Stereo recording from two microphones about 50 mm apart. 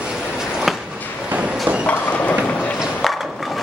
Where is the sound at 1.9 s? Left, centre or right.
Left.